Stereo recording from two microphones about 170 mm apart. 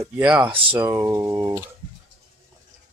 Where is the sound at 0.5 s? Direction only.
30° right (ahead or behind).